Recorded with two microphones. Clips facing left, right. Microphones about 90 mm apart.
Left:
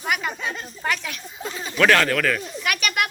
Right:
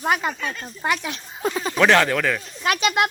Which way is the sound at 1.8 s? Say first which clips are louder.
Right 1 dB; 20° right (ahead or behind).